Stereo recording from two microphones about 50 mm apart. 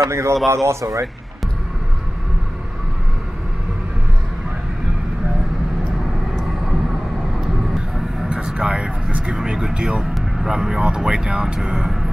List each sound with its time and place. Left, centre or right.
0.1 s speech: right
8.5 s speech: centre